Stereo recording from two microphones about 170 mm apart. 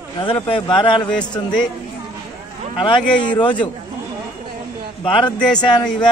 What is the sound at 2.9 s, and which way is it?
Speech, 25° left (ahead or behind).